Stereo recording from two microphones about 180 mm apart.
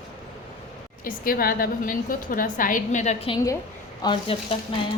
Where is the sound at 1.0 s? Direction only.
50° left (ahead or behind); by 4.4 s 30° left (ahead or behind).